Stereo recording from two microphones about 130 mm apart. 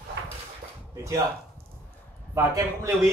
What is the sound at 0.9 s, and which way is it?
Speech, 25° right (ahead or behind).